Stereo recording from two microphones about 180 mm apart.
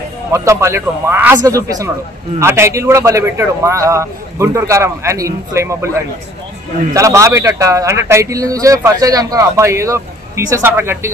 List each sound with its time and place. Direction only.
0.3 s a man's voice: 15° right (ahead or behind)